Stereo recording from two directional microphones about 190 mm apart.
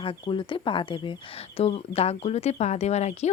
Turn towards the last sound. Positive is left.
turn(degrees=35)  # may be behind; listen again after turning